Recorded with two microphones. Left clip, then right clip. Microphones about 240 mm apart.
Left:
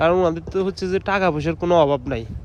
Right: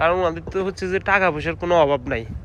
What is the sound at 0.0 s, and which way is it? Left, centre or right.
Speech, left.